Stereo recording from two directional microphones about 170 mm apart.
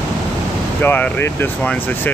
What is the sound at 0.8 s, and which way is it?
Speech, 10° left (ahead or behind).